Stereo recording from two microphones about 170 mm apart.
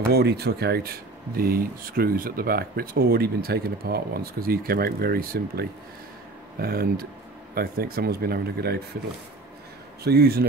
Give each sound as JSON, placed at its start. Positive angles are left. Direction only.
{"t": 0.1, "sound": "speech", "side_deg": -70}
{"t": 10.0, "sound": "a man's voice", "side_deg": -65}